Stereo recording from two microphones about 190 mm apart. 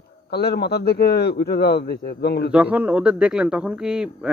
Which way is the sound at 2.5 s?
5° right (ahead or behind).